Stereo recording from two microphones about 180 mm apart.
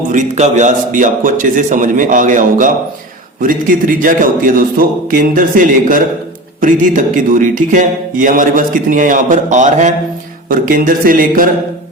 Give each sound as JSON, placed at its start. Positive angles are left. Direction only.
{"t": 0.1, "sound": "speech", "side_deg": -40}